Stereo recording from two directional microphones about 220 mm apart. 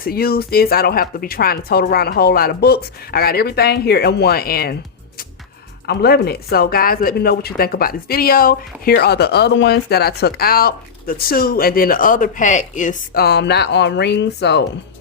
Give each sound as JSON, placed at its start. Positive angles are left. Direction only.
{"t": 0.0, "sound": "speech", "side_deg": 45}